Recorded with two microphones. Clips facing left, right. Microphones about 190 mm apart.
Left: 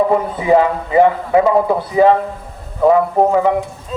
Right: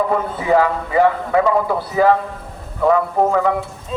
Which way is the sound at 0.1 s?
20° left (ahead or behind).